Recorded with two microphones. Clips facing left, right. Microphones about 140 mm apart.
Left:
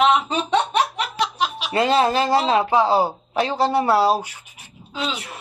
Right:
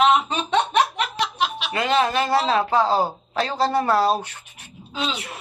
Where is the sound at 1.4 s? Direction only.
35° left (ahead or behind); by 4.3 s 10° left (ahead or behind).